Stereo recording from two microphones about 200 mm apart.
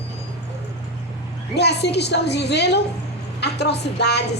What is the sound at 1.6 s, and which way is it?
A woman's voice, 55° left (ahead or behind).